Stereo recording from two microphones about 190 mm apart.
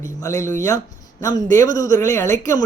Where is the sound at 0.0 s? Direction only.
15° left (ahead or behind).